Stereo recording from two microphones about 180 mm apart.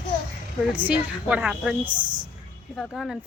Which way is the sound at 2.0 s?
25° right (ahead or behind).